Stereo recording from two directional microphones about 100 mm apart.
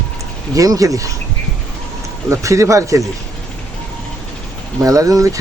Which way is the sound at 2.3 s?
30° right (ahead or behind).